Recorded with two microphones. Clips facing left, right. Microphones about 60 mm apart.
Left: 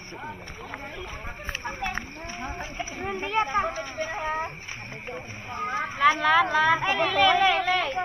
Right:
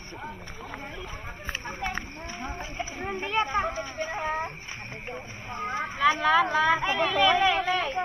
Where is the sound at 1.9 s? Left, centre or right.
Left.